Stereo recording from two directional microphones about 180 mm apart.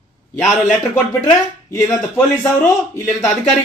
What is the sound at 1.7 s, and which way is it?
Speech, 15° left (ahead or behind).